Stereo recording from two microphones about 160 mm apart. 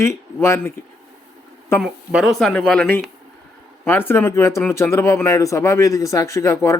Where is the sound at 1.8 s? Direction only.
Centre (ahead or behind).